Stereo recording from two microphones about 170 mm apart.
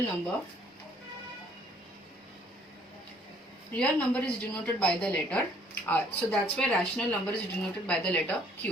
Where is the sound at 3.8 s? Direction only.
10° left (ahead or behind).